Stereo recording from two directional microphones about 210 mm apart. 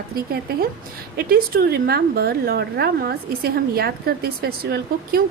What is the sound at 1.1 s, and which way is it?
A woman's voice, 50° right (ahead or behind).